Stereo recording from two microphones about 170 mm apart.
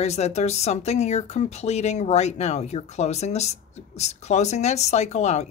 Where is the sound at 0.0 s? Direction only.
40° left (ahead or behind).